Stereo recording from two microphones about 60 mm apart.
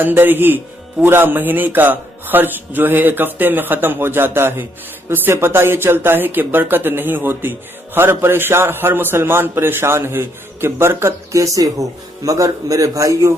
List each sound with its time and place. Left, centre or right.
0.0 s speech: right
11.3 s a man's voice: right